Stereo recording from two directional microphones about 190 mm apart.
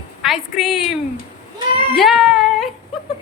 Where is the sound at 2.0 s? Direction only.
Centre (ahead or behind).